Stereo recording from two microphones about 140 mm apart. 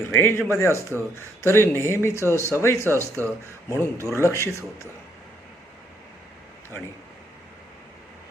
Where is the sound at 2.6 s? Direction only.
20° left (ahead or behind).